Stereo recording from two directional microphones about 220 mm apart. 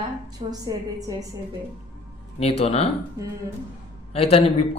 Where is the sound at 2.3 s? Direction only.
25° left (ahead or behind).